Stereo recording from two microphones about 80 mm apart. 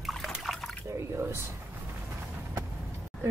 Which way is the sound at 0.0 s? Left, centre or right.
Centre.